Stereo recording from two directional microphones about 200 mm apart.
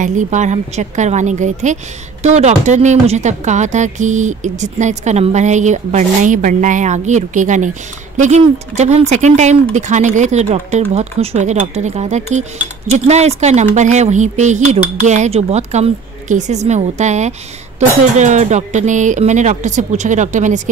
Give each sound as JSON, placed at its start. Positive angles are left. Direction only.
{"t": 0.0, "sound": "a woman's voice", "side_deg": -35}